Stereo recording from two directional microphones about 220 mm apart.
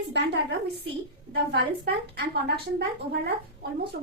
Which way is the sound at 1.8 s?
45° right (ahead or behind).